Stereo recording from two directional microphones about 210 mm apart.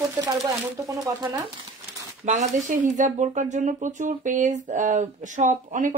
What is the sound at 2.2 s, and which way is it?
Speech, 35° right (ahead or behind).